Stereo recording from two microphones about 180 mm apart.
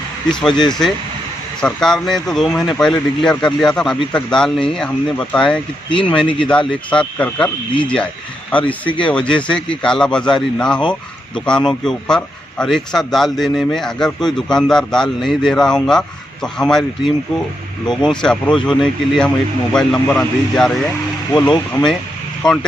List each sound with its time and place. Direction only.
0.3 s speech: 5° left (ahead or behind)
9.0 s speech: 5° left (ahead or behind)
21.3 s speech: 25° left (ahead or behind)
22.4 s speech: 5° left (ahead or behind)